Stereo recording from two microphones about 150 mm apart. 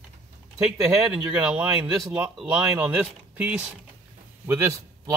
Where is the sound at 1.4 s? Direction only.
10° right (ahead or behind).